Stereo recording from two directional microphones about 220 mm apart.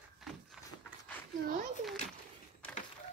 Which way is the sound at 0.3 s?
Centre (ahead or behind).